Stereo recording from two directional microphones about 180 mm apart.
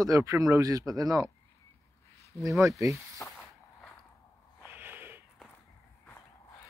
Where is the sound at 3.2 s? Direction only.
5° left (ahead or behind).